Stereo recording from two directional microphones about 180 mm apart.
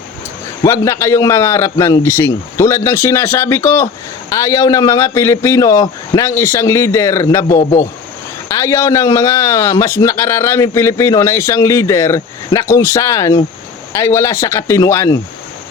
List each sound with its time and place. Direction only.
0.6 s a man's voice: 15° left (ahead or behind)
8.4 s a man's voice: 15° left (ahead or behind)